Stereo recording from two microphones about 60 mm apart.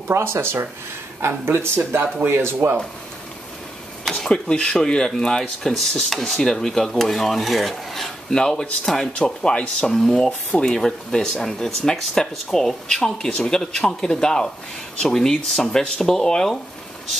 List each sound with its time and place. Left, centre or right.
0.1 s speech: right
4.3 s speech: centre